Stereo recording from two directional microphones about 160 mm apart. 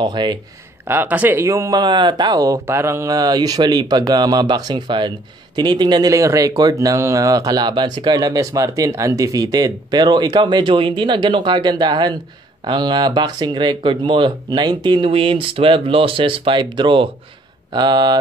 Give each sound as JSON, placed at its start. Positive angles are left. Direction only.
{"t": 0.0, "sound": "speech", "side_deg": -30}
{"t": 0.8, "sound": "speech", "side_deg": -10}